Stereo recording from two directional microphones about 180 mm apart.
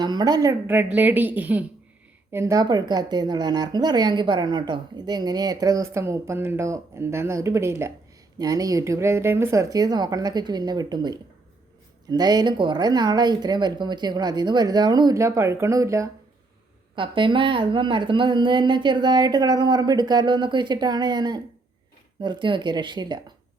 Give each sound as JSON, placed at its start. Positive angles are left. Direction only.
{"t": 0.0, "sound": "a woman's voice", "side_deg": -25}